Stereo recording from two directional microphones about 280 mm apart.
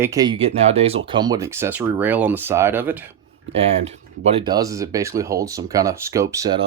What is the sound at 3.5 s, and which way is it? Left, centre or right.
Speech, right.